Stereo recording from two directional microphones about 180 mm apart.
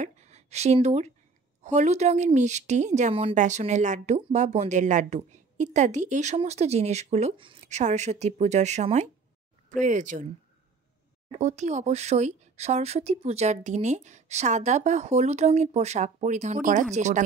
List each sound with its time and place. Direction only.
0.0 s a woman's voice: 40° right (ahead or behind)
11.3 s a woman's voice: 40° right (ahead or behind)